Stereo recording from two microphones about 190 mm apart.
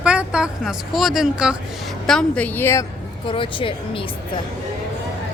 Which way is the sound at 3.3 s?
25° left (ahead or behind).